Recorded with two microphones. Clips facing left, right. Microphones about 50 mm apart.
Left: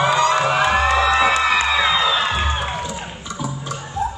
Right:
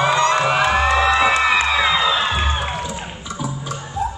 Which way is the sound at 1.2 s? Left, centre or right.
Right.